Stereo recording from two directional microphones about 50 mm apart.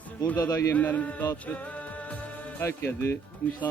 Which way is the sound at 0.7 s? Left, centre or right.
Left.